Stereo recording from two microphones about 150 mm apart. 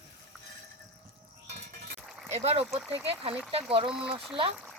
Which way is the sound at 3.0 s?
40° right (ahead or behind).